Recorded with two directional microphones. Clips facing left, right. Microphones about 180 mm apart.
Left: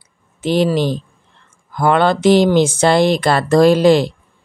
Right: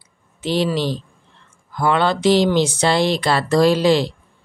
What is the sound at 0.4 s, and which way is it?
A man's voice, 50° left (ahead or behind).